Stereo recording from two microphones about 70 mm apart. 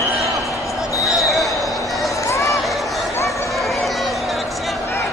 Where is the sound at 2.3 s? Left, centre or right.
Left.